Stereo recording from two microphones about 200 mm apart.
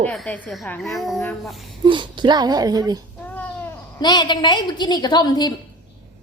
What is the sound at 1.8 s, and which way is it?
Speech, 25° right (ahead or behind).